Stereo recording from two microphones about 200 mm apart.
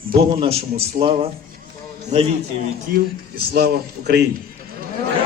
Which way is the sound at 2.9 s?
50° right (ahead or behind).